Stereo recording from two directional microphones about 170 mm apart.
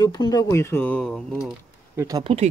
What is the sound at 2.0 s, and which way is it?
Speech, 20° right (ahead or behind).